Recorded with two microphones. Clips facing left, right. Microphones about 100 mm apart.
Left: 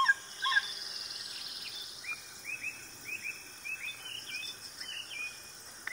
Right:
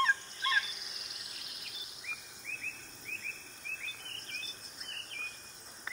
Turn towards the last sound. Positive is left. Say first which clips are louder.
# even
turn(degrees=0)  # may be behind; listen again after turning